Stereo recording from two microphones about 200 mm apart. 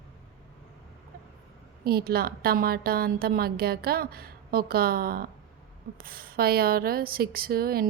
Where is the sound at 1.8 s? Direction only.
50° right (ahead or behind).